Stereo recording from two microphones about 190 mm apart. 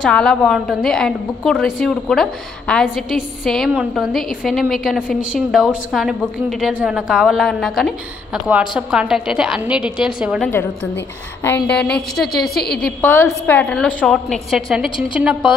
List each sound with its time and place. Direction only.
0.0 s a woman's voice: 5° left (ahead or behind)
11.4 s a woman's voice: 10° left (ahead or behind)
12.3 s a woman's voice: 55° left (ahead or behind)
12.8 s a woman's voice: 10° left (ahead or behind); by 15.5 s 5° right (ahead or behind)